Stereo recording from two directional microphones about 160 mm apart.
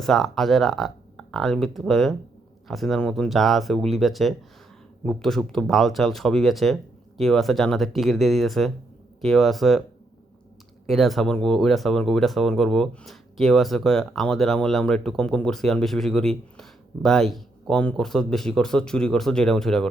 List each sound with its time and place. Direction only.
0.0 s speech: centre (ahead or behind)
10.8 s speech: centre (ahead or behind)